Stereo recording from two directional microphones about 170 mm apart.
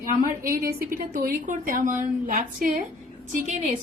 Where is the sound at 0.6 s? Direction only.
60° right (ahead or behind).